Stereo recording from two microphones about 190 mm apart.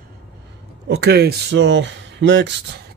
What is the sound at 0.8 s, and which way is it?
Speech, 60° right (ahead or behind).